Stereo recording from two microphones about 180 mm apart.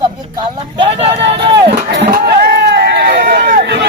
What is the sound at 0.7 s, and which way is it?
Speech, 25° right (ahead or behind).